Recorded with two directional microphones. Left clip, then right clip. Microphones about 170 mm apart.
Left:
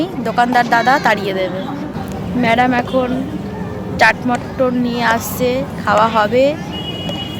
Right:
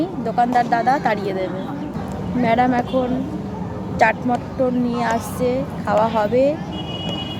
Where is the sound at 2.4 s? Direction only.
15° right (ahead or behind).